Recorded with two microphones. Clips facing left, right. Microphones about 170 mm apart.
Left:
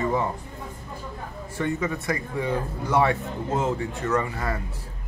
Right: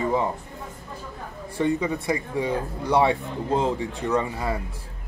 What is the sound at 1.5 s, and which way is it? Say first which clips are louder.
Speech: right 3 dB; 15° right (ahead or behind).